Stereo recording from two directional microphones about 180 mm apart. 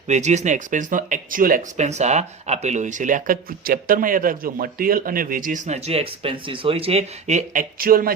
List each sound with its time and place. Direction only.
0.1 s speech: 40° right (ahead or behind)